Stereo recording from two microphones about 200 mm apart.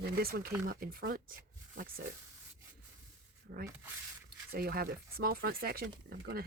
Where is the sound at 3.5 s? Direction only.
55° right (ahead or behind).